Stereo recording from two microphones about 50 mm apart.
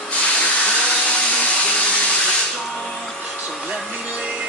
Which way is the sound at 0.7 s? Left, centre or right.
Left.